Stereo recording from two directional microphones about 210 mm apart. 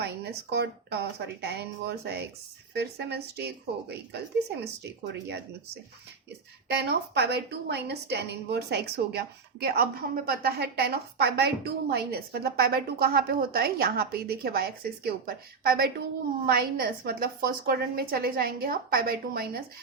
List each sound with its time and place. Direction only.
0.0 s a woman's voice: 50° right (ahead or behind)
6.7 s a woman's voice: 55° right (ahead or behind)